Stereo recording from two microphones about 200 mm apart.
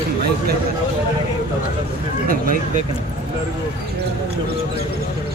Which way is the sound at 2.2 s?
45° right (ahead or behind).